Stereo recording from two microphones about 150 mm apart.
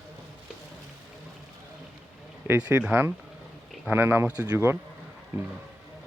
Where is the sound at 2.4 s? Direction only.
15° right (ahead or behind).